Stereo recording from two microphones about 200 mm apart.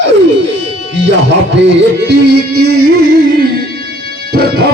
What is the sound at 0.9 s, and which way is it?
Music, 65° right (ahead or behind).